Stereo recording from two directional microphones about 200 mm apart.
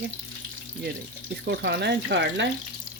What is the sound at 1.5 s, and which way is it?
Speech, 55° right (ahead or behind).